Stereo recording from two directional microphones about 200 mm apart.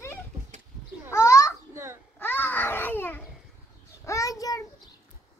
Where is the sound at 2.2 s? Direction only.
10° left (ahead or behind).